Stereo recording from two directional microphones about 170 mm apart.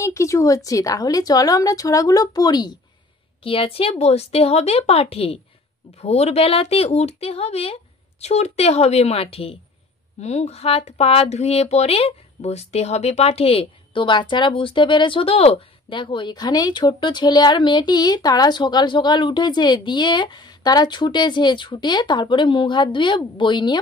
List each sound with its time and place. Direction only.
0.0 s a woman's voice: 20° left (ahead or behind)